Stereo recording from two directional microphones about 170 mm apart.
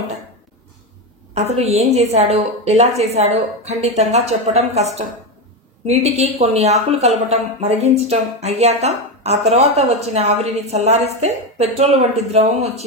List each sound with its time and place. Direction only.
1.3 s a woman's voice: 40° right (ahead or behind)